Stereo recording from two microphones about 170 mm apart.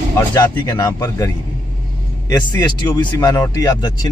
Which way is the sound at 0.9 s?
15° left (ahead or behind).